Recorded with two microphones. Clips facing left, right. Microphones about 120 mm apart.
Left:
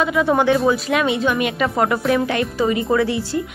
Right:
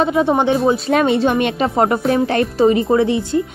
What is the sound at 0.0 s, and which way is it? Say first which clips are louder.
Speech: right 2 dB; 30° right (ahead or behind).